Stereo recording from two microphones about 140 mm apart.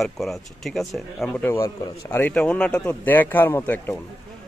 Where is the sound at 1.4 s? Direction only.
20° left (ahead or behind).